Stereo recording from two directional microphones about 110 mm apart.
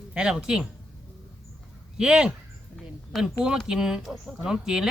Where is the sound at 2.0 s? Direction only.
10° right (ahead or behind).